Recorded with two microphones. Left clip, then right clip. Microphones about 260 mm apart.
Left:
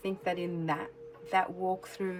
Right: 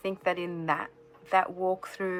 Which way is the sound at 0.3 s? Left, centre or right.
Centre.